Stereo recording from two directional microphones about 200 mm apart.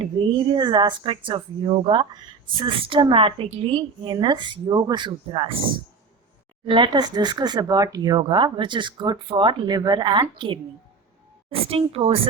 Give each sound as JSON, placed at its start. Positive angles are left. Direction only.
{"t": 0.0, "sound": "speech", "side_deg": -25}
{"t": 6.7, "sound": "speech", "side_deg": -25}